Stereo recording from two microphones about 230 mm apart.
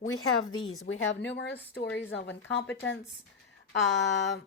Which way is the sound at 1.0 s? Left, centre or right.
Left.